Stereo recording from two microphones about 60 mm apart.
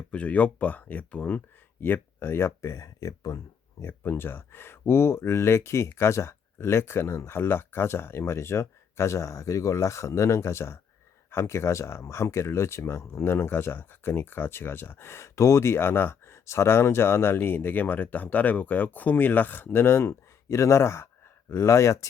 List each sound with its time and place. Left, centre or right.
0.1 s speech: left
1.8 s speech: left
3.8 s speech: left